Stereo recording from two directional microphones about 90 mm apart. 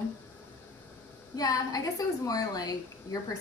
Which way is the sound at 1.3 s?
45° left (ahead or behind).